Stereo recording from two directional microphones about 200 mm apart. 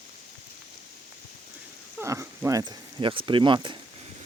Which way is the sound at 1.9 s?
15° right (ahead or behind).